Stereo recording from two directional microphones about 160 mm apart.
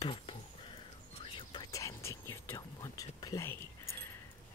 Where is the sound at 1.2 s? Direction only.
30° left (ahead or behind).